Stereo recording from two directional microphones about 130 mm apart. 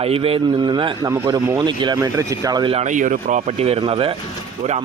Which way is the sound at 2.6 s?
45° right (ahead or behind).